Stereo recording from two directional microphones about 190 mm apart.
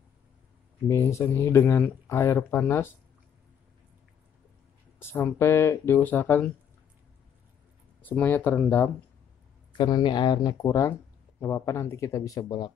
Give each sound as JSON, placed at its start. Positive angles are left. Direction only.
{"t": 0.8, "sound": "speech", "side_deg": 15}
{"t": 5.0, "sound": "speech", "side_deg": 15}
{"t": 8.0, "sound": "speech", "side_deg": 10}
{"t": 9.7, "sound": "speech", "side_deg": 25}